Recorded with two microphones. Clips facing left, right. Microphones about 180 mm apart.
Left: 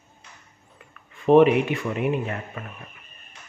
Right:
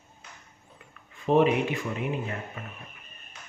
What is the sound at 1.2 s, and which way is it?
Speech, 65° left (ahead or behind).